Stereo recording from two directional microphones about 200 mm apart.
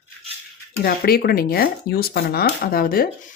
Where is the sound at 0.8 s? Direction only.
50° left (ahead or behind).